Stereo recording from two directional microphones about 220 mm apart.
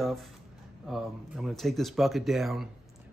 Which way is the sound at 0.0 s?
Centre (ahead or behind).